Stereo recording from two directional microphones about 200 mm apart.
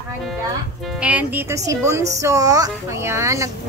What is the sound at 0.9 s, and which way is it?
Speech, 5° right (ahead or behind).